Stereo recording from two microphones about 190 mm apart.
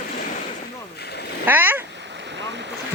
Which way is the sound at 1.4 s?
10° right (ahead or behind).